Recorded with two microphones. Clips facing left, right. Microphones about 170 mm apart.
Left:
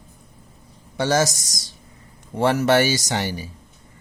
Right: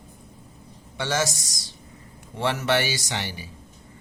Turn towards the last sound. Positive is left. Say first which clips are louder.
# left 7 dB
turn(degrees=40)  # may be behind; listen again after turning